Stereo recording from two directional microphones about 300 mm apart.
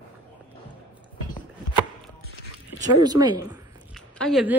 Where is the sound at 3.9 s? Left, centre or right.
Centre.